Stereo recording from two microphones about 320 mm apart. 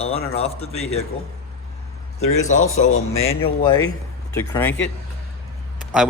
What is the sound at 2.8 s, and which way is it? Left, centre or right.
Speech, left.